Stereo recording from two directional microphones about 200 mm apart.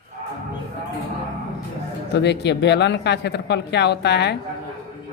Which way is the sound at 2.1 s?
60° left (ahead or behind).